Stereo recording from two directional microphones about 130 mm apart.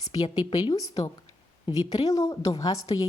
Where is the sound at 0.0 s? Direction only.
30° left (ahead or behind).